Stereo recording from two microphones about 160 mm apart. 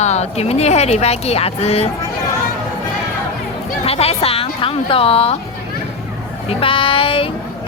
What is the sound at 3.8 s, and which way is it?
A woman's voice, 40° left (ahead or behind).